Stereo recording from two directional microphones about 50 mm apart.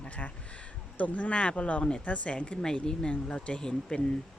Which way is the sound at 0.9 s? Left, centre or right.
Left.